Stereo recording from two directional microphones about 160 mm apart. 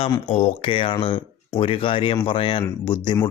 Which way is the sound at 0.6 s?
35° left (ahead or behind).